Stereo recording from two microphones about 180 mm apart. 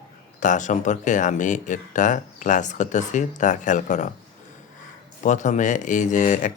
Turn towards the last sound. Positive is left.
turn(degrees=45)  # may be behind; listen again after turning